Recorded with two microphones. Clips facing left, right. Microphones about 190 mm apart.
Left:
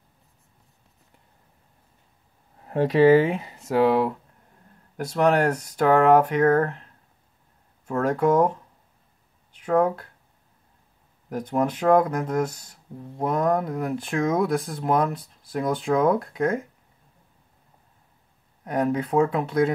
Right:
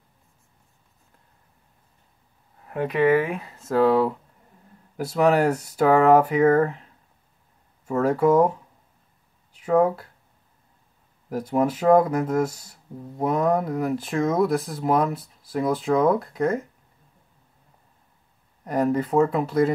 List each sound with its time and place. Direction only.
2.6 s speech: 35° left (ahead or behind)
3.8 s speech: 5° left (ahead or behind)
9.6 s speech: 5° right (ahead or behind)
11.2 s speech: 5° right (ahead or behind)
18.6 s speech: centre (ahead or behind)